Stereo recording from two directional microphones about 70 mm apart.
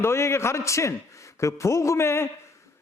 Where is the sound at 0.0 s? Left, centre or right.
Left.